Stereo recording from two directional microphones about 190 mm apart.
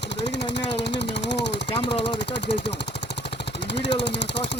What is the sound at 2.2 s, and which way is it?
Speech, 65° left (ahead or behind).